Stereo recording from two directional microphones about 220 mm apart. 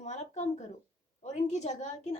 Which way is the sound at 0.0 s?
30° left (ahead or behind).